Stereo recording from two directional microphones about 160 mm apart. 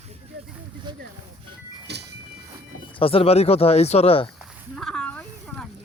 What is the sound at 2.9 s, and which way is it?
Speech, 35° left (ahead or behind).